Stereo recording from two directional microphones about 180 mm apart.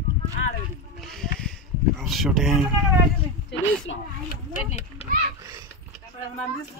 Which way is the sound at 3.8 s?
90° left.